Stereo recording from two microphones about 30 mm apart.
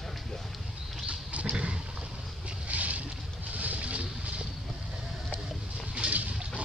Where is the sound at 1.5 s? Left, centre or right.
Right.